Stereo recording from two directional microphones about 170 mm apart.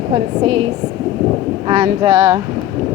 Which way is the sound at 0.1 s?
30° right (ahead or behind).